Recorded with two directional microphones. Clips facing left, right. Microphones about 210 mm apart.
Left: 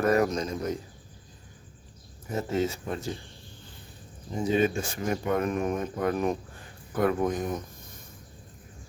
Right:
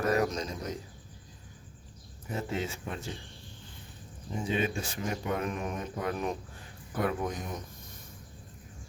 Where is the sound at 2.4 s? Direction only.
40° left (ahead or behind).